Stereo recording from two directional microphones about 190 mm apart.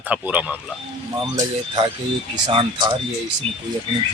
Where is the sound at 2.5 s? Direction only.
25° right (ahead or behind).